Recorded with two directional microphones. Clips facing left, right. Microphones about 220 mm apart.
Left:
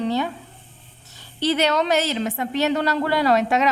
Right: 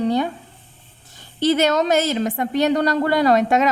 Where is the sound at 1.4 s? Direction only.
45° right (ahead or behind).